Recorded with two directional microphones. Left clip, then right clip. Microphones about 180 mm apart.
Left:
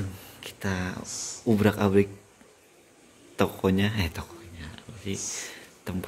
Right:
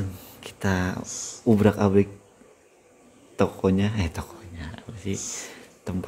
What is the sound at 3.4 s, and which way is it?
Speech, 5° right (ahead or behind).